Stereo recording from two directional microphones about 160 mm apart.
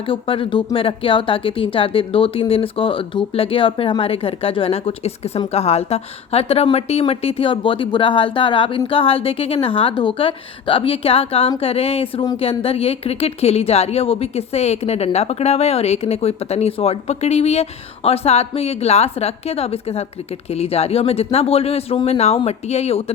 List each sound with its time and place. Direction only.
0.0 s a woman's voice: 35° left (ahead or behind)